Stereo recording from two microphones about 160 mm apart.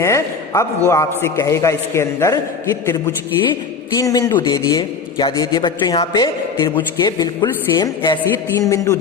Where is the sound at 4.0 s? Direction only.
20° left (ahead or behind).